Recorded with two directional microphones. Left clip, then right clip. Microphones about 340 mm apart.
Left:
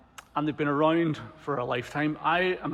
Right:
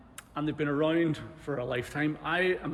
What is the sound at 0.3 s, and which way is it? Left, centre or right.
Speech, centre.